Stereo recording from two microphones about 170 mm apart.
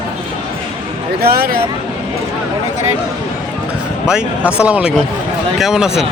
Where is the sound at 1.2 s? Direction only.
65° right (ahead or behind).